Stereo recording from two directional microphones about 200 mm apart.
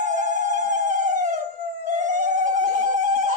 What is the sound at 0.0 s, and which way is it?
Music, 35° right (ahead or behind).